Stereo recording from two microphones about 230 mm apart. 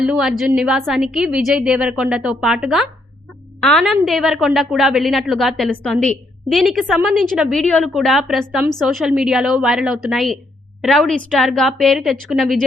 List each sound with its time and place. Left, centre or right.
0.0 s a woman's voice: centre